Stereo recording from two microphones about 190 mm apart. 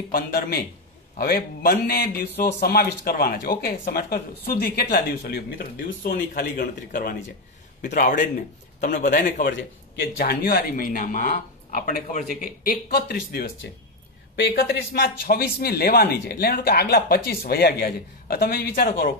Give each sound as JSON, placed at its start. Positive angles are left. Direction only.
{"t": 0.1, "sound": "a man's voice", "side_deg": 50}